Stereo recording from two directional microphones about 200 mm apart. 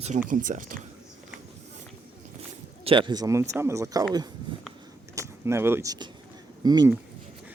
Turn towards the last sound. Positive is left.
turn(degrees=-20)  # may be behind; listen again after turning